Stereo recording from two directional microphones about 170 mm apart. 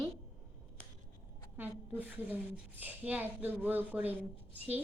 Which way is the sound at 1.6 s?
10° right (ahead or behind).